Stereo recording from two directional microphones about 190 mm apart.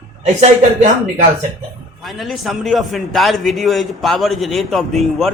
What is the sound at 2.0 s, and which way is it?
A man's voice, centre (ahead or behind).